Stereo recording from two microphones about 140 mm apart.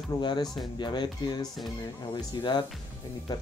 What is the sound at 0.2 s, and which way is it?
Speech, 35° left (ahead or behind).